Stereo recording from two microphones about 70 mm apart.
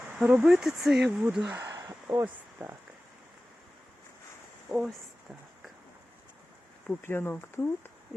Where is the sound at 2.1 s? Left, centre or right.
Right.